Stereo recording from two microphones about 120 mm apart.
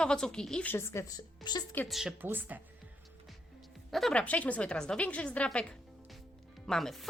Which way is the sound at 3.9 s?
5° left (ahead or behind).